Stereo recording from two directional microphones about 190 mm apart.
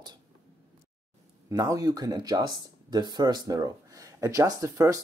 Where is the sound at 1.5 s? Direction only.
20° right (ahead or behind).